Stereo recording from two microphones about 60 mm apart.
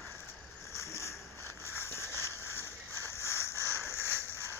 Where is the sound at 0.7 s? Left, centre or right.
Left.